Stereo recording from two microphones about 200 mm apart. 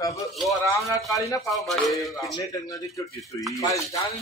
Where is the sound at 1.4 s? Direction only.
Centre (ahead or behind).